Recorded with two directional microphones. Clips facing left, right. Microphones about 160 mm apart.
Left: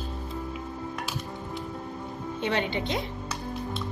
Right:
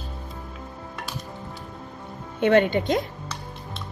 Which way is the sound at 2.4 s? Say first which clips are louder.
Right 10 dB; 50° right (ahead or behind).